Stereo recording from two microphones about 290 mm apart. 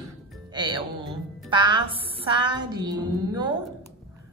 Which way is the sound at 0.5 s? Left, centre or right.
Centre.